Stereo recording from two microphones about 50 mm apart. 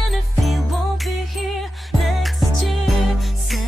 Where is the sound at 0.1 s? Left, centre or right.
Centre.